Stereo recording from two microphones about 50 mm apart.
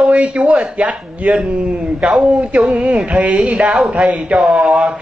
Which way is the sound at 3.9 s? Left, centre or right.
Right.